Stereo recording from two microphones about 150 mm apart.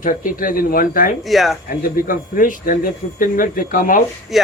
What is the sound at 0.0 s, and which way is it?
Speech, 65° left (ahead or behind).